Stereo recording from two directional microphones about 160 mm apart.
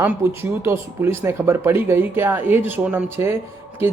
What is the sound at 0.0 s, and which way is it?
Speech, 15° right (ahead or behind).